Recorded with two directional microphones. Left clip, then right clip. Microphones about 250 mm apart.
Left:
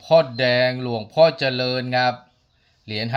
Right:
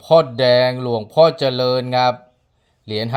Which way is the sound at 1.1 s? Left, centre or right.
Centre.